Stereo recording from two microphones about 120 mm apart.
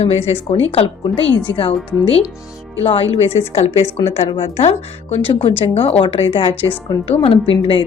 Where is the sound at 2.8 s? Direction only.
50° left (ahead or behind).